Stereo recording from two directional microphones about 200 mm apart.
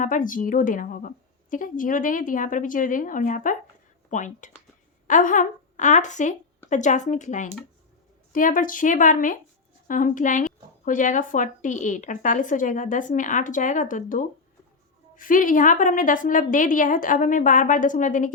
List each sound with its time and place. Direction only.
0.0 s a woman's voice: 40° left (ahead or behind)